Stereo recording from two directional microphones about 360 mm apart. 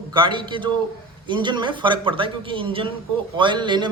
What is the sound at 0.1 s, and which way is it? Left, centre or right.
A man's voice, centre.